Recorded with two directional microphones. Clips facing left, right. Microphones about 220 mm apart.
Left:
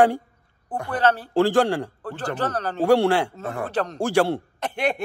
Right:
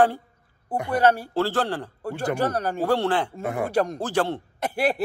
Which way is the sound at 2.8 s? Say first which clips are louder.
Left 6 dB; 10° left (ahead or behind).